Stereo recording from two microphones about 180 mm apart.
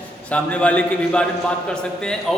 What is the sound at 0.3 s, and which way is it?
A man's voice, 5° left (ahead or behind).